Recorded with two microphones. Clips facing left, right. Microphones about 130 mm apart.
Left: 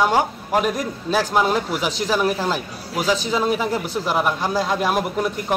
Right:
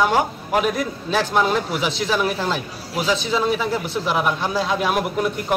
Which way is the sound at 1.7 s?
40° left (ahead or behind).